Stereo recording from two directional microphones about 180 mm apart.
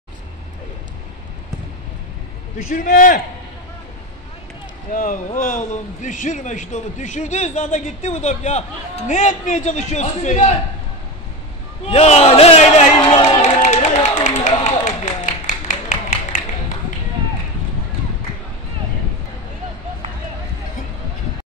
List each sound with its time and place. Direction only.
2.7 s a man's voice: 50° left (ahead or behind)
4.9 s a man's voice: 50° left (ahead or behind)
11.9 s crowd: 35° left (ahead or behind)
13.6 s a sound: 40° left (ahead or behind)